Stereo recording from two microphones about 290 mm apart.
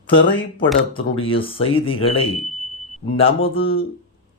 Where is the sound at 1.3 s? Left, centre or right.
Centre.